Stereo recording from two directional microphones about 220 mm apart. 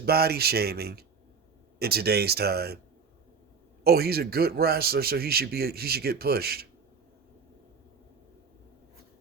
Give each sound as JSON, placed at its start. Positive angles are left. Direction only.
{"t": 0.0, "sound": "a man's voice", "side_deg": -45}
{"t": 3.8, "sound": "a man's voice", "side_deg": -45}